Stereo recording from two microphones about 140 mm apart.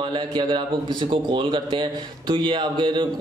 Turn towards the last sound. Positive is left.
turn(degrees=-35)  # may be behind; listen again after turning